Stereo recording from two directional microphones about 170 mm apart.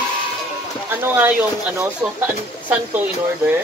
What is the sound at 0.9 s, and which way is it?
Speech, 10° right (ahead or behind).